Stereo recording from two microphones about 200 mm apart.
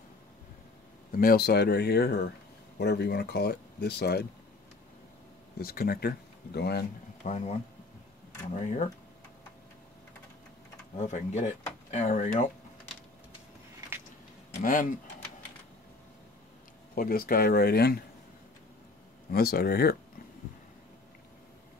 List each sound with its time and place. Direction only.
1.1 s speech: 50° left (ahead or behind)
5.6 s speech: 50° left (ahead or behind)
7.2 s speech: 35° left (ahead or behind)
8.5 s speech: 35° left (ahead or behind)
11.0 s speech: 35° left (ahead or behind)
14.6 s speech: 40° left (ahead or behind)
16.9 s speech: 45° left (ahead or behind)
19.3 s speech: 50° left (ahead or behind)